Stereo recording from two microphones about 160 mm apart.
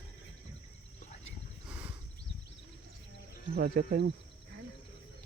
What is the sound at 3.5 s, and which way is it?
Speech, 75° right (ahead or behind).